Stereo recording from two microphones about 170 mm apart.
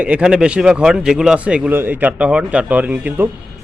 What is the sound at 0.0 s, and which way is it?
A man's voice, 5° right (ahead or behind).